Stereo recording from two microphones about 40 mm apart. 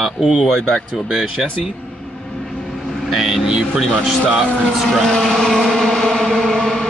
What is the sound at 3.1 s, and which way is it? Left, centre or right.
Vehicle, centre.